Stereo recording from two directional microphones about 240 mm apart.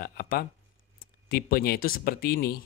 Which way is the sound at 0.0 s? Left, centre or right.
Left.